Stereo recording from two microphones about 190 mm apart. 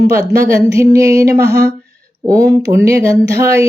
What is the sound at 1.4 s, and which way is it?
Speech, 60° right (ahead or behind).